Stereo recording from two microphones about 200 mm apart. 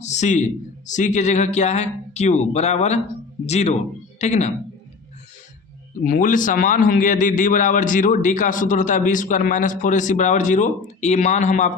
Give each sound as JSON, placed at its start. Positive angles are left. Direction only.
{"t": 0.0, "sound": "a man's voice", "side_deg": 35}
{"t": 6.1, "sound": "a man's voice", "side_deg": 40}